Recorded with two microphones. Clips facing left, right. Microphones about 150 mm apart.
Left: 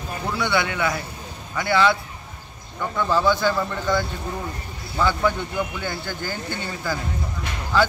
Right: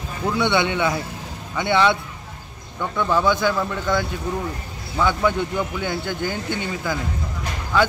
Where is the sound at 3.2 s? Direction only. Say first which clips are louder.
Left 1 dB; 15° right (ahead or behind).